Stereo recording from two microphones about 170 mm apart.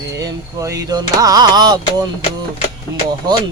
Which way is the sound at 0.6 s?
20° right (ahead or behind).